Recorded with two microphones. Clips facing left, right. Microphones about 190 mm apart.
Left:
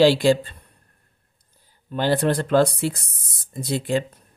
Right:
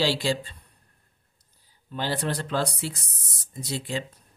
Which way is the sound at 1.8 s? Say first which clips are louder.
Left 8 dB; 55° left (ahead or behind).